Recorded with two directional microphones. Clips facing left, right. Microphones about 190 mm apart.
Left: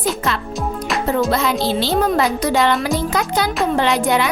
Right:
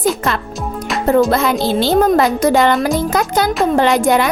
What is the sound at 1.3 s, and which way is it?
A child's voice, 50° right (ahead or behind).